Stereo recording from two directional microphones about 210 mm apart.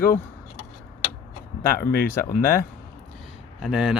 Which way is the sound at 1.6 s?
45° left (ahead or behind).